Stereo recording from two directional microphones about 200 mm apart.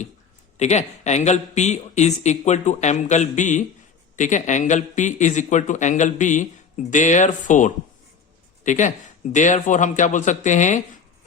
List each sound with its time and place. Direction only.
0.5 s speech: 35° left (ahead or behind)